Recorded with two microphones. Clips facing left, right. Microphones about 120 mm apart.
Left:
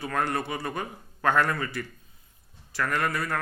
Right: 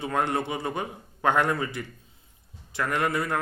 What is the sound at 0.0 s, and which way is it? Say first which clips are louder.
A man's voice: right 2 dB; 20° right (ahead or behind).